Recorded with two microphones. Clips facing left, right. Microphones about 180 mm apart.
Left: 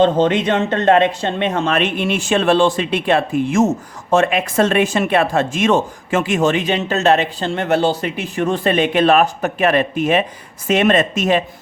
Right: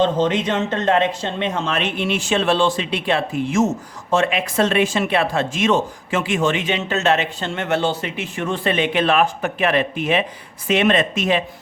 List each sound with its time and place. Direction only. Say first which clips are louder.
0.0 s speech: left 4 dB; 60° left (ahead or behind); by 11.4 s 45° left (ahead or behind)